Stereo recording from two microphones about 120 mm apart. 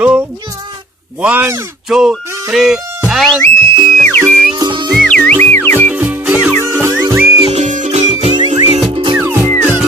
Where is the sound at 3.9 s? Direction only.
10° left (ahead or behind).